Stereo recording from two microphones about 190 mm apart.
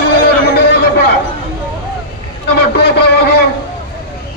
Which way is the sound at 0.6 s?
60° left (ahead or behind).